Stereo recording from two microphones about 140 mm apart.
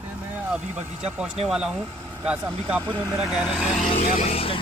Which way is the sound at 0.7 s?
10° right (ahead or behind).